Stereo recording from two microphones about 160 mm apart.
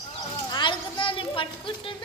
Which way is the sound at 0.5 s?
30° left (ahead or behind).